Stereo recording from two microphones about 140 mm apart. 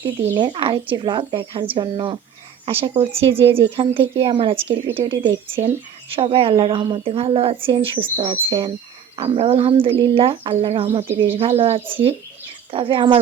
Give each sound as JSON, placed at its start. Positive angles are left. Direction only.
{"t": 0.0, "sound": "a woman's voice", "side_deg": -35}